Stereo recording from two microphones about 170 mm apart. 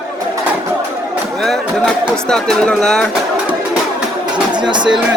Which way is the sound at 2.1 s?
5° left (ahead or behind).